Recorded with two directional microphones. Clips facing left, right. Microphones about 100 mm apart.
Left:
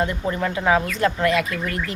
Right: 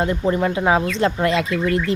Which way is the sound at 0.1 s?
25° right (ahead or behind).